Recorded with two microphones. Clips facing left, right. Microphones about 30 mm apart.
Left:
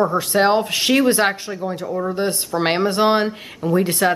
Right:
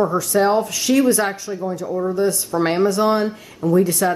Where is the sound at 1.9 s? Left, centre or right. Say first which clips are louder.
Right 2 dB; left.